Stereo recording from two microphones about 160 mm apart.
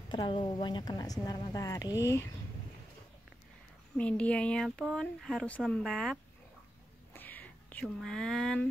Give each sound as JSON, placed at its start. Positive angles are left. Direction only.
{"t": 0.1, "sound": "a woman's voice", "side_deg": 30}
{"t": 4.0, "sound": "speech", "side_deg": 5}
{"t": 7.2, "sound": "whispering", "side_deg": 10}
{"t": 7.8, "sound": "speech", "side_deg": 0}